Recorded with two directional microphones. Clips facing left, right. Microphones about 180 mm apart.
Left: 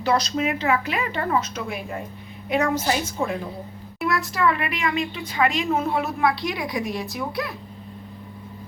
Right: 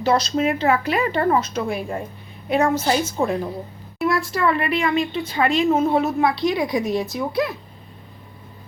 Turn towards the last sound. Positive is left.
turn(degrees=-20)  # may be behind; listen again after turning